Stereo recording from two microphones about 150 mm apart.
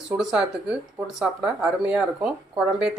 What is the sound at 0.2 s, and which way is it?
Speech, 5° right (ahead or behind).